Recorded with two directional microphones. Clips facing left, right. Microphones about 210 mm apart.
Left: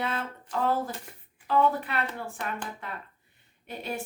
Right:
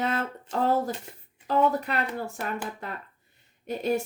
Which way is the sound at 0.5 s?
25° right (ahead or behind).